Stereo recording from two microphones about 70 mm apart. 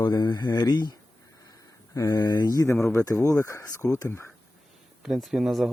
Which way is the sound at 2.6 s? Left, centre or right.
Left.